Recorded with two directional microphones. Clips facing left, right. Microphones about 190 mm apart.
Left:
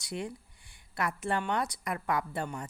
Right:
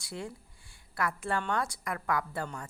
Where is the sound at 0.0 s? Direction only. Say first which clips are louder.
Left 3 dB; 20° left (ahead or behind).